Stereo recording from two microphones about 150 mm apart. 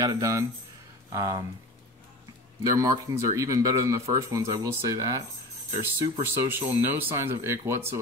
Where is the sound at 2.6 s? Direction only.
20° right (ahead or behind).